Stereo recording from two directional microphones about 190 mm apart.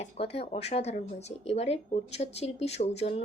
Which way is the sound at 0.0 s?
30° left (ahead or behind).